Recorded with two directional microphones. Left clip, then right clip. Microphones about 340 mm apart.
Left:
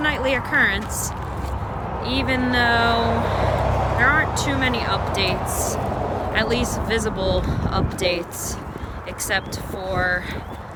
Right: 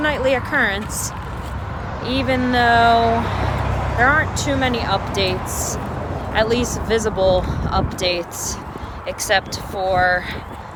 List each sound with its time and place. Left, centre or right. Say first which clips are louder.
0.0 s speech: right 3 dB; centre
2.0 s speech: right 3 dB; centre
3.1 s vehicle: right 1 dB; left
4.0 s speech: right 3 dB; centre